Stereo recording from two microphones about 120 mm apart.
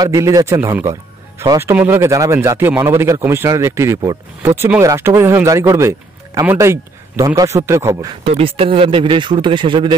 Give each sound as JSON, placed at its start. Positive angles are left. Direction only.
{"t": 0.0, "sound": "speech", "side_deg": -30}
{"t": 8.2, "sound": "speech", "side_deg": -55}